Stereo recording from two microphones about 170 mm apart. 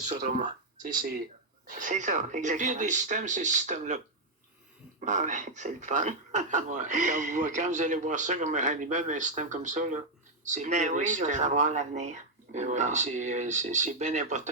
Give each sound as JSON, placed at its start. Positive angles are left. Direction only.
{"t": 0.1, "sound": "speech", "side_deg": -50}